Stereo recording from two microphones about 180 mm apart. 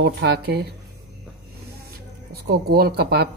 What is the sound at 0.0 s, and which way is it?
Speech, 65° right (ahead or behind).